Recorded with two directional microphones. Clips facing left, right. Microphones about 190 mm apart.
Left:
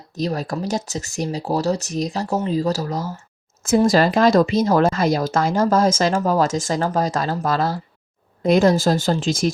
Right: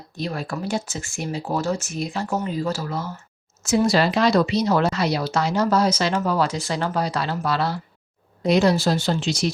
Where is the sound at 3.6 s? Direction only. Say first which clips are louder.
Left 3 dB; 50° left (ahead or behind).